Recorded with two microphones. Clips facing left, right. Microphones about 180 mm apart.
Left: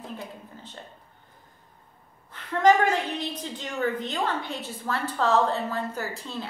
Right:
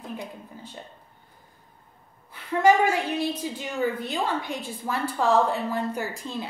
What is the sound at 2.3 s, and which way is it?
A woman's voice, 10° right (ahead or behind).